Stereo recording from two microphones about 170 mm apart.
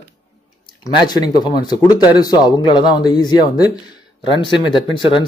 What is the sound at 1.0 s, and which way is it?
Speech, 25° left (ahead or behind).